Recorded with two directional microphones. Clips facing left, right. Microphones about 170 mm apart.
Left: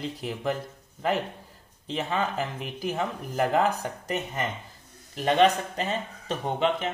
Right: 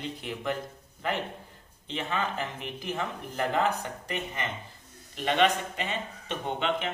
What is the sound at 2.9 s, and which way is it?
Speech, 10° left (ahead or behind).